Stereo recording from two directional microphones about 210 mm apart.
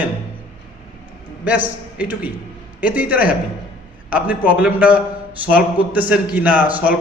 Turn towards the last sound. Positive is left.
turn(degrees=-10)  # may be behind; listen again after turning